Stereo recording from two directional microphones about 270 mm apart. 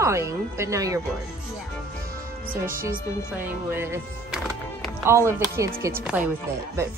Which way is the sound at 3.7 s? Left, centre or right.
Centre.